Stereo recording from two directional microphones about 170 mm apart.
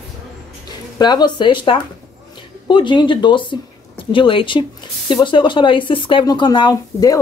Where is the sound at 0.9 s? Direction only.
25° left (ahead or behind).